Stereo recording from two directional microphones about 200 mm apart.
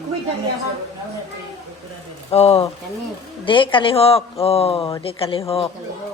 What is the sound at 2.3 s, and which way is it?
Speech, 30° left (ahead or behind).